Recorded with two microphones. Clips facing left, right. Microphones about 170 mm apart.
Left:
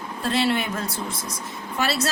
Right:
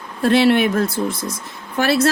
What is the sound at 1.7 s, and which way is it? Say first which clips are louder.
Speech: right 8 dB; 55° right (ahead or behind).